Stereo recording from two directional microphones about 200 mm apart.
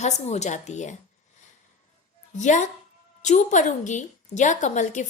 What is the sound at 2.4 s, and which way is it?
A woman's voice, 40° left (ahead or behind).